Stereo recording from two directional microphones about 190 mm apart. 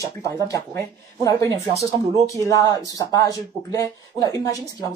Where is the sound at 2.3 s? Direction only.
15° left (ahead or behind).